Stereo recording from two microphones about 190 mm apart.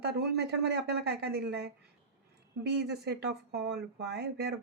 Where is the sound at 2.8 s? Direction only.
60° right (ahead or behind).